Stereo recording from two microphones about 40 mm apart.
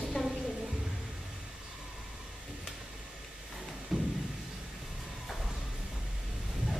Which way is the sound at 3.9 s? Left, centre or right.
Centre.